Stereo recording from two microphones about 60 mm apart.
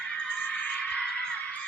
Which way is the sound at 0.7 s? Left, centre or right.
Left.